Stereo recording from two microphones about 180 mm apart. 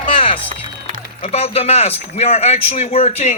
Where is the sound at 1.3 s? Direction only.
35° left (ahead or behind).